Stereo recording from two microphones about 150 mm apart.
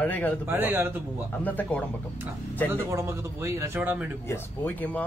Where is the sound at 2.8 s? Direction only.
20° right (ahead or behind).